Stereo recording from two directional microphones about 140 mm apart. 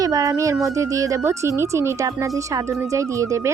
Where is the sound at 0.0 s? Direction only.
25° right (ahead or behind).